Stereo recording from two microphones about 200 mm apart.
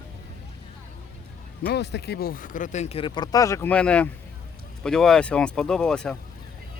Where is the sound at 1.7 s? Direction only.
55° left (ahead or behind); by 6.2 s 5° left (ahead or behind).